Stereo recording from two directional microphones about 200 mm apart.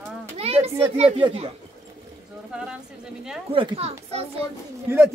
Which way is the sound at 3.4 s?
25° right (ahead or behind).